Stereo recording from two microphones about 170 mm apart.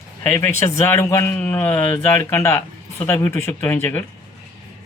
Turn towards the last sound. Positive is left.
turn(degrees=10)  # may be behind; listen again after turning